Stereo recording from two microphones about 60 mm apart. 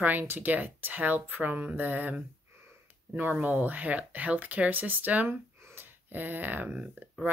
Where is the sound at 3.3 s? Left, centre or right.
Right.